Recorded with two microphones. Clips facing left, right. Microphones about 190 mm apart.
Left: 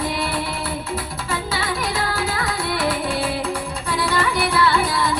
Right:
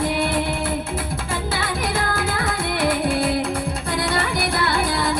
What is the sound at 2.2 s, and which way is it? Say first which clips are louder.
Music: even; 50° right (ahead or behind).